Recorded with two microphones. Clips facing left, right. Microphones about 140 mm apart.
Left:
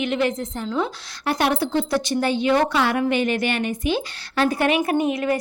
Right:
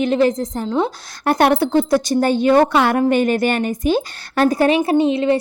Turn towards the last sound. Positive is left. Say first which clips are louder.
# right 6 dB
turn(degrees=-25)  # may be behind; listen again after turning